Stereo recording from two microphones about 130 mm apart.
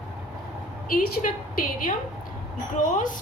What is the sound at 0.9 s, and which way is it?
A woman's voice, 90° left.